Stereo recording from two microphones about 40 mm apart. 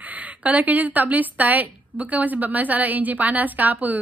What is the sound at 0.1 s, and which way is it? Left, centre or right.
A woman's voice, right.